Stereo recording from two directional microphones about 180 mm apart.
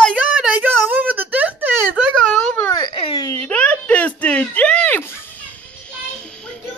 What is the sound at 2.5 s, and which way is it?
Baby cry, 10° left (ahead or behind).